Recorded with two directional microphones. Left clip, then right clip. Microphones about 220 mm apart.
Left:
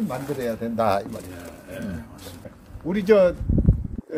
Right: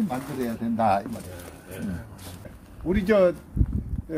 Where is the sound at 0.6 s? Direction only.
50° left (ahead or behind).